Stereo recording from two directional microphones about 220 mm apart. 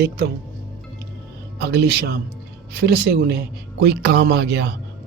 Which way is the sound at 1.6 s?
50° right (ahead or behind).